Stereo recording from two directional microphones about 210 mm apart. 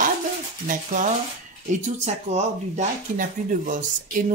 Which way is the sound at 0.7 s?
35° right (ahead or behind).